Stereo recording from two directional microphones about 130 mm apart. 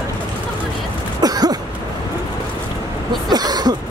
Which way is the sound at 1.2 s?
30° right (ahead or behind).